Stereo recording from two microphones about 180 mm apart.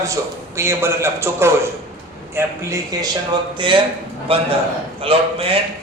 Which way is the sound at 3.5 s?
25° right (ahead or behind).